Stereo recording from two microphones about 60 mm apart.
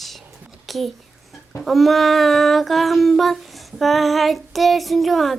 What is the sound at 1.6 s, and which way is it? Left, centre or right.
Child singing, centre.